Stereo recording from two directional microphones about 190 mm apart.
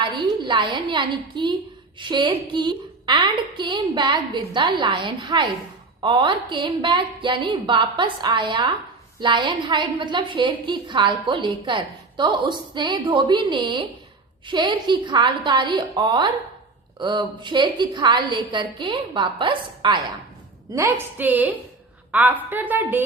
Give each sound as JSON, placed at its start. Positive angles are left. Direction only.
{"t": 0.4, "sound": "a woman's voice", "side_deg": -25}
{"t": 20.7, "sound": "a woman's voice", "side_deg": -10}